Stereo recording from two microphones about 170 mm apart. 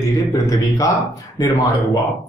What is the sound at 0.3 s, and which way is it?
Speech, 20° left (ahead or behind).